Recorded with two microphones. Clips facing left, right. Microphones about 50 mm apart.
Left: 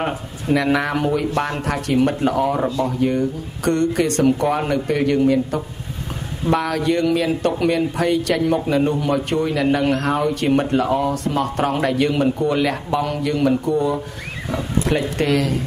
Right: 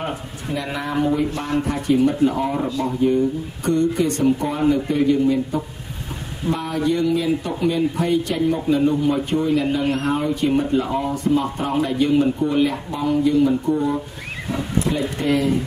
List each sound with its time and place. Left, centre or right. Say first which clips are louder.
0.0 s a man's voice: left 3 dB; left